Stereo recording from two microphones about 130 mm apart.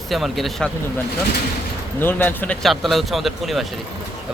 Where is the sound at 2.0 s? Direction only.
15° left (ahead or behind).